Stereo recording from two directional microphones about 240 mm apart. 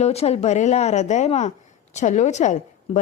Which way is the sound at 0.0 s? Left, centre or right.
Left.